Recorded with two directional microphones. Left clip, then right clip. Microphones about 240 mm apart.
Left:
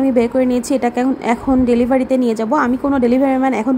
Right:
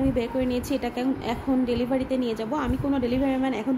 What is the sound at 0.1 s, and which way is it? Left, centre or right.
A woman's voice, left.